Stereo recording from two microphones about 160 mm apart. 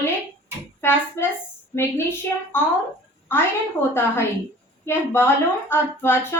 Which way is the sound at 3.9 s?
15° left (ahead or behind).